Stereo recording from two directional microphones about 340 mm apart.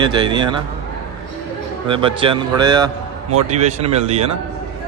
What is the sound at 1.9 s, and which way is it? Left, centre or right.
A man's voice, centre.